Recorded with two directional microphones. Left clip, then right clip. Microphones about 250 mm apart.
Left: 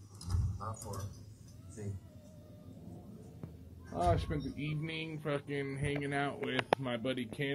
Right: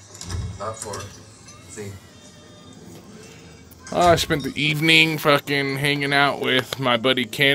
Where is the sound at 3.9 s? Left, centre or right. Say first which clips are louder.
Right 17 dB; right.